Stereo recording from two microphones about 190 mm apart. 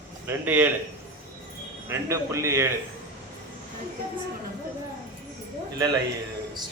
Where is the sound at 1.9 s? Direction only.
15° right (ahead or behind).